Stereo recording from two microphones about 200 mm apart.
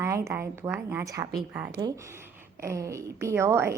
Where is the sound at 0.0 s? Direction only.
15° right (ahead or behind).